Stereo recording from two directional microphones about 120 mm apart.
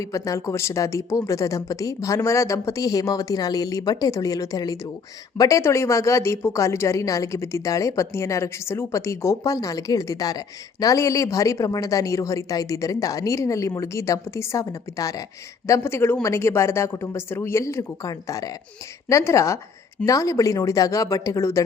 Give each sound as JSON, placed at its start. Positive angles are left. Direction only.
{"t": 0.0, "sound": "a woman's voice", "side_deg": 25}